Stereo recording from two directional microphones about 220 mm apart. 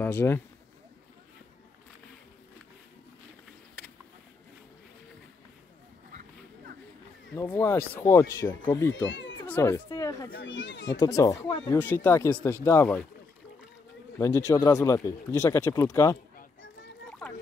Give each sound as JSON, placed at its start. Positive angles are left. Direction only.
{"t": 0.0, "sound": "speech", "side_deg": 10}
{"t": 7.3, "sound": "speech", "side_deg": 10}
{"t": 8.9, "sound": "speech", "side_deg": 60}
{"t": 9.4, "sound": "speech", "side_deg": 10}
{"t": 10.3, "sound": "a child's voice", "side_deg": 55}
{"t": 11.0, "sound": "speech", "side_deg": 15}
{"t": 11.7, "sound": "speech", "side_deg": 10}
{"t": 14.1, "sound": "speech", "side_deg": 15}
{"t": 17.2, "sound": "a sound", "side_deg": 5}